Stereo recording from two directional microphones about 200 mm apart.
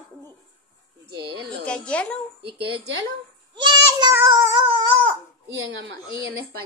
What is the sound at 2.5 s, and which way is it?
Speech, 60° right (ahead or behind).